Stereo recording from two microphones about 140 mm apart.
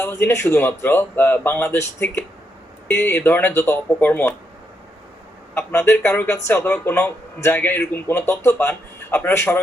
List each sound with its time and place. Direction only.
0.0 s speech: 20° left (ahead or behind)
5.5 s speech: 15° left (ahead or behind)